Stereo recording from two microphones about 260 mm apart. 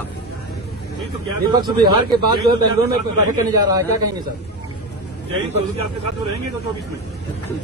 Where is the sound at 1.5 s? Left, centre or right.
Centre.